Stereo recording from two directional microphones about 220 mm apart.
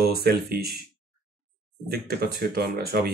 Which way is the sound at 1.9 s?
45° right (ahead or behind).